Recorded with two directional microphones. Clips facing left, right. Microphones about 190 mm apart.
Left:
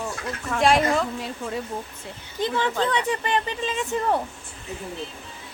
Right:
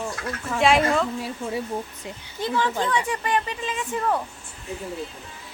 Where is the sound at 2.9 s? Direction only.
25° left (ahead or behind).